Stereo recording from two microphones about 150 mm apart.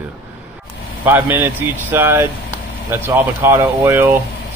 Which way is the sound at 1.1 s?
10° right (ahead or behind).